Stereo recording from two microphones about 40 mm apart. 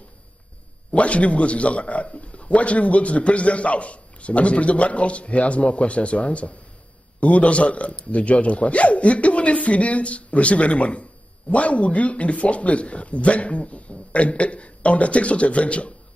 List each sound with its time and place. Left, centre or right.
0.9 s a man's voice: left